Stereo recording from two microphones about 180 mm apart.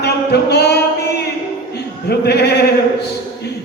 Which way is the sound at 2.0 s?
65° left (ahead or behind).